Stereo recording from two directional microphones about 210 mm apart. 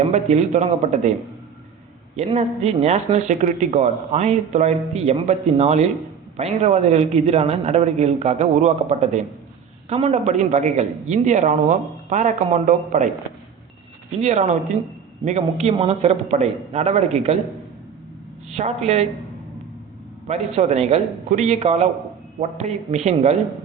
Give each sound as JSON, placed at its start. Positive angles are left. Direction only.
{"t": 0.0, "sound": "speech", "side_deg": -30}
{"t": 2.1, "sound": "speech", "side_deg": -30}
{"t": 14.1, "sound": "speech", "side_deg": -30}
{"t": 20.2, "sound": "speech", "side_deg": -30}